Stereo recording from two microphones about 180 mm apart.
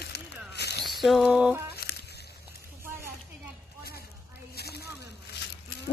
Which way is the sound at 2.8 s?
15° right (ahead or behind).